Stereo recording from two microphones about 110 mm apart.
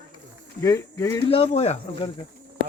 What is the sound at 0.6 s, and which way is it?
Speech, 25° left (ahead or behind).